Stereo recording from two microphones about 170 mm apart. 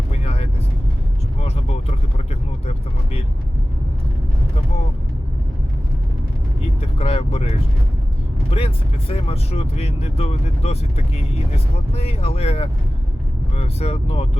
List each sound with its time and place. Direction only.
0.1 s vehicle: 35° left (ahead or behind)
7.0 s vehicle: 35° left (ahead or behind)
11.5 s speech: 35° left (ahead or behind)